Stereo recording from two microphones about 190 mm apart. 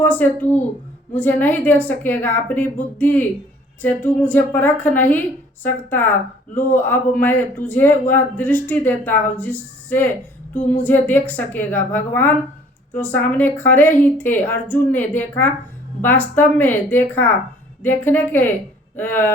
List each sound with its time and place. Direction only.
0.0 s a woman's voice: 10° left (ahead or behind)
6.5 s speech: 45° left (ahead or behind)
6.7 s a woman's voice: 10° left (ahead or behind)